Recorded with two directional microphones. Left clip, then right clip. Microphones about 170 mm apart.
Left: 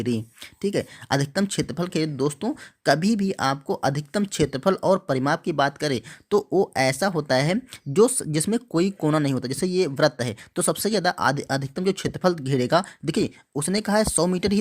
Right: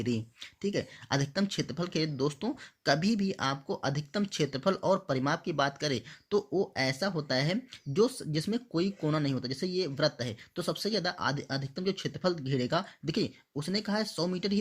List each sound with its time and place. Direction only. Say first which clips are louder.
0.6 s speech: left 8 dB; 35° left (ahead or behind)